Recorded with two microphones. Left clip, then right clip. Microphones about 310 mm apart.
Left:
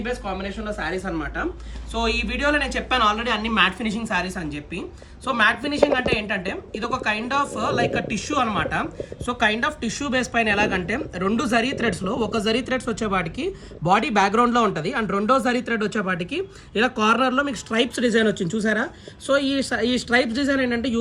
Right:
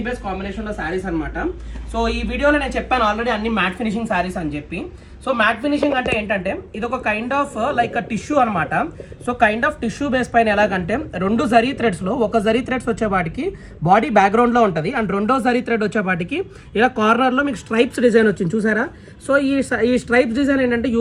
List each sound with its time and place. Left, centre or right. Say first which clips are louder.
0.0 s a woman's voice: right 2 dB; centre
12.0 s a woman's voice: right 6 dB; centre